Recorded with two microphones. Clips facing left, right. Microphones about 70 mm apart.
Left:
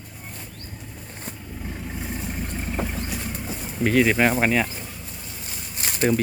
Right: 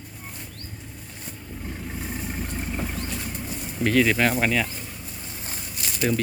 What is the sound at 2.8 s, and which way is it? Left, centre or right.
Boat, centre.